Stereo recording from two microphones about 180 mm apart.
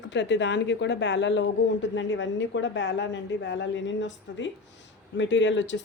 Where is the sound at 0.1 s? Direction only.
80° left.